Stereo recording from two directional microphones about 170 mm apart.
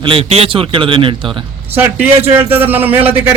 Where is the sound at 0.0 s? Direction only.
35° right (ahead or behind).